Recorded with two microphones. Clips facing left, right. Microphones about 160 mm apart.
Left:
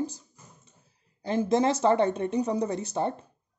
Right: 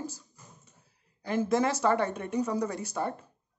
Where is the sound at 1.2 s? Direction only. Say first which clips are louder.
Left 3 dB; 20° left (ahead or behind).